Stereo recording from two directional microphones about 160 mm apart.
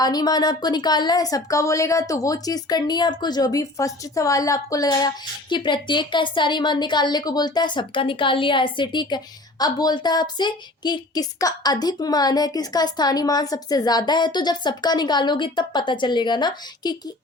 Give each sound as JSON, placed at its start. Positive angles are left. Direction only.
{"t": 0.0, "sound": "speech", "side_deg": 25}